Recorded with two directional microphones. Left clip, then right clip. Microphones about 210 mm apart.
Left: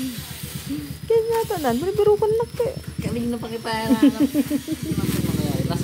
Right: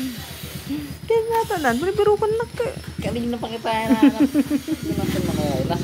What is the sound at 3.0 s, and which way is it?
Speech, 50° left (ahead or behind).